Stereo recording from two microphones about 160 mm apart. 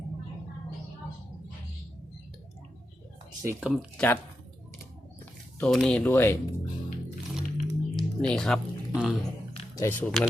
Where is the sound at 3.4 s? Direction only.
15° right (ahead or behind).